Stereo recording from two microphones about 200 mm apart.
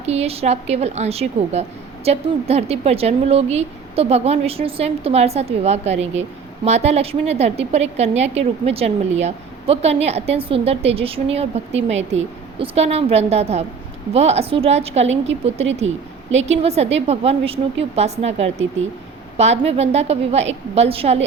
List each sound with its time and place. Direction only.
0.0 s a woman's voice: 30° right (ahead or behind)